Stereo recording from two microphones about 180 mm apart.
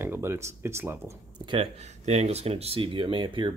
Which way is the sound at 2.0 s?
35° right (ahead or behind).